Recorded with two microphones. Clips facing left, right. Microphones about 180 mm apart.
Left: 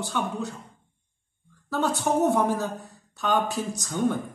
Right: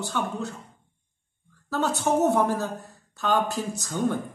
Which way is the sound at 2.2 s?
Centre (ahead or behind).